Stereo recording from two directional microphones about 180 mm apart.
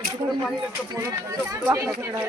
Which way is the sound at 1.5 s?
15° right (ahead or behind).